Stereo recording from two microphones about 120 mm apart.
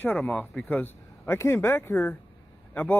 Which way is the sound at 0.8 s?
20° left (ahead or behind).